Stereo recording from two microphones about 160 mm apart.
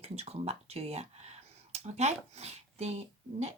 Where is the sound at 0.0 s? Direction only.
40° right (ahead or behind).